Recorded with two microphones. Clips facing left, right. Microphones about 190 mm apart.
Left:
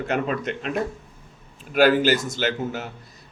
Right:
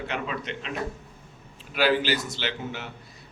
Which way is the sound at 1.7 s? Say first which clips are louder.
Left 6 dB; 45° left (ahead or behind).